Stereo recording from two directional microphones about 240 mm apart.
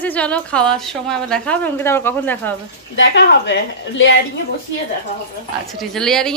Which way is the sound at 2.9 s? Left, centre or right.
Left.